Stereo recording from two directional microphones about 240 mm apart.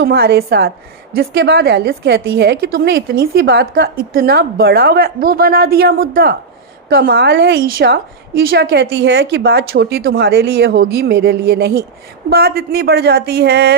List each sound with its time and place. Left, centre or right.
0.0 s a woman's voice: right